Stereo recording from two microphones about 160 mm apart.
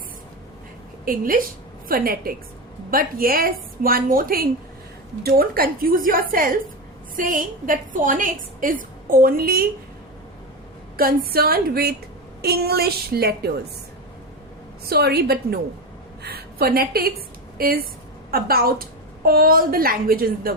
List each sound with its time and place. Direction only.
1.0 s a woman's voice: 60° right (ahead or behind)
10.9 s a woman's voice: 65° right (ahead or behind)
14.8 s a woman's voice: 75° right (ahead or behind)